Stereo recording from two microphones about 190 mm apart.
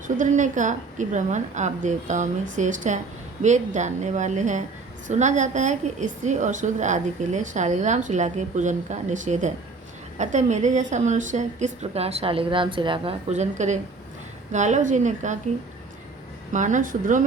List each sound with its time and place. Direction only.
0.2 s a woman's voice: 40° right (ahead or behind)
16.5 s speech: 40° right (ahead or behind)